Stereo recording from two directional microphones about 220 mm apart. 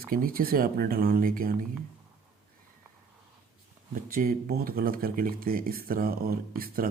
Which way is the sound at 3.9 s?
40° right (ahead or behind).